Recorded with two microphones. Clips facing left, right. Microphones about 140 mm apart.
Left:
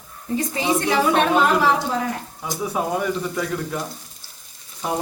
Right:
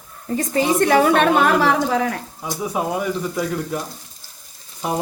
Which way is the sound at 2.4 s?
15° right (ahead or behind).